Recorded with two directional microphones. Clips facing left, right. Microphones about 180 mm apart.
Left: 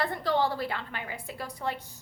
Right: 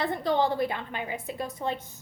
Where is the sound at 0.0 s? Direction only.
20° right (ahead or behind).